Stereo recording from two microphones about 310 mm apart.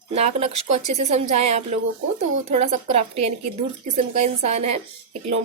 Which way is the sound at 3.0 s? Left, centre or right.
Right.